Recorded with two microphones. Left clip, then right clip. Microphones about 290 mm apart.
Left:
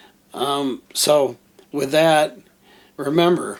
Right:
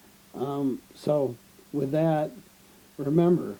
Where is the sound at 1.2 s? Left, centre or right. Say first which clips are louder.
Left 8 dB; left.